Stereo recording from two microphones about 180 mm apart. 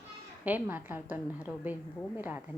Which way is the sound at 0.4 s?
10° right (ahead or behind).